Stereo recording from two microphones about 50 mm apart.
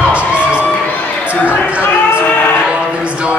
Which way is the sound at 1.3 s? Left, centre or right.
Left.